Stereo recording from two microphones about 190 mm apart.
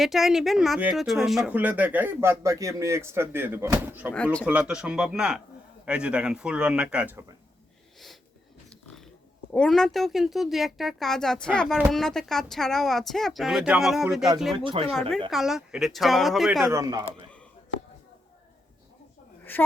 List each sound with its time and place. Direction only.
0.0 s speech: centre (ahead or behind)
4.1 s speech: 5° left (ahead or behind)
4.4 s a woman's voice: 5° right (ahead or behind)
9.5 s a woman's voice: 5° left (ahead or behind)
14.6 s speech: 25° right (ahead or behind)
15.3 s a woman's voice: centre (ahead or behind)
16.6 s speech: 15° right (ahead or behind)
19.5 s a sound: 10° left (ahead or behind)